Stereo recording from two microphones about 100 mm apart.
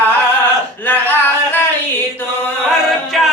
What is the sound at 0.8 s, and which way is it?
Speech, 20° left (ahead or behind).